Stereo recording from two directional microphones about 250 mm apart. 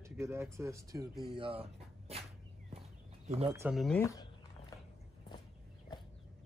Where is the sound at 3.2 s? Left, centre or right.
Right.